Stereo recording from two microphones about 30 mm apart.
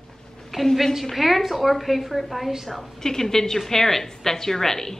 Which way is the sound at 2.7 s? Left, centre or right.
Centre.